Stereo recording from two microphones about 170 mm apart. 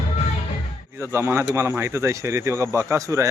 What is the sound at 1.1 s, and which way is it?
A man's voice, 15° right (ahead or behind).